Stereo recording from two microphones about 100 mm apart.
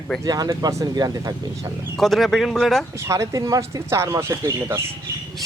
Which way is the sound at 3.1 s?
30° right (ahead or behind).